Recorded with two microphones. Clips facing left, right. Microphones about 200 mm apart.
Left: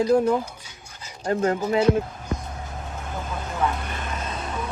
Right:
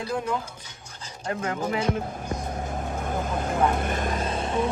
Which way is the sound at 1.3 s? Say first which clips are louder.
Left 7 dB; 30° left (ahead or behind).